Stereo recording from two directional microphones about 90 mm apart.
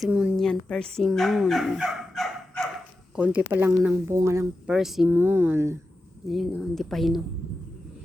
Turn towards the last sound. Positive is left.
turn(degrees=0)  # may be behind; listen again after turning